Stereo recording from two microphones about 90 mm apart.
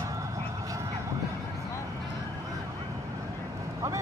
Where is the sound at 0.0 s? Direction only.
35° right (ahead or behind).